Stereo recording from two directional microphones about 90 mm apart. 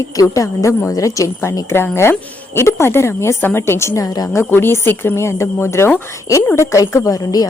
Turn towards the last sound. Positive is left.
turn(degrees=45)  # may be behind; listen again after turning